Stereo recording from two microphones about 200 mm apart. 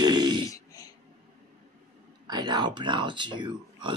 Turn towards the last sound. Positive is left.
turn(degrees=-25)  # may be behind; listen again after turning